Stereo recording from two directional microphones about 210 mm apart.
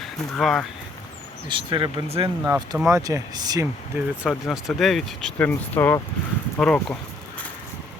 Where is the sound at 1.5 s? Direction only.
25° right (ahead or behind).